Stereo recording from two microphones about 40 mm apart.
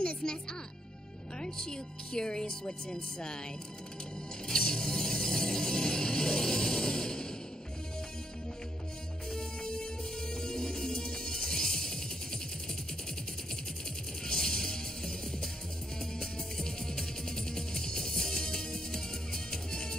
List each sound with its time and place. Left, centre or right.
0.0 s speech: centre
4.5 s music: centre
9.3 s music: centre
14.2 s music: centre